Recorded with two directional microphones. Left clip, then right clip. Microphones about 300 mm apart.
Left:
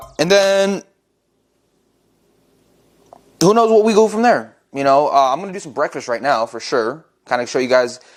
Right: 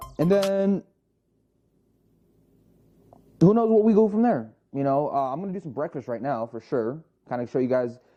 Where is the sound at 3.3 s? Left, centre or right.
Centre.